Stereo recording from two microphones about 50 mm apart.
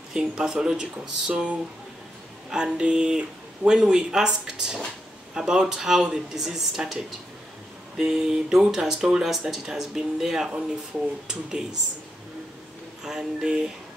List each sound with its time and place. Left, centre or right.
0.1 s speech: centre
2.5 s speech: centre
8.0 s speech: centre
10.5 s speech: centre
13.0 s speech: centre